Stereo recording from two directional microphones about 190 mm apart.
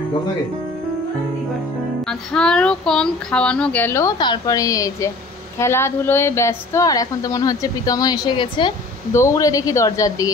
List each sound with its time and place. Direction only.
2.0 s a woman's voice: 5° left (ahead or behind)